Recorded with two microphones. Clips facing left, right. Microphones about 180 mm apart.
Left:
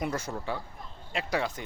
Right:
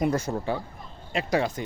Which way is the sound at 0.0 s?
40° right (ahead or behind).